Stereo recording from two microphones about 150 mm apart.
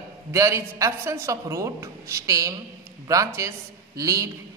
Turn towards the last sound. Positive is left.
turn(degrees=-20)  # may be behind; listen again after turning